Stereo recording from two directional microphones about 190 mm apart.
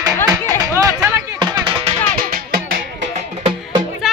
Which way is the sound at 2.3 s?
50° right (ahead or behind).